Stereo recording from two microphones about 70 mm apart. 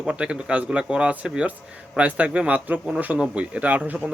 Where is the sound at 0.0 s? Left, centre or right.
Centre.